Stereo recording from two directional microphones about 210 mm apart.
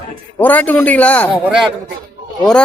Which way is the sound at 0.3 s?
10° left (ahead or behind).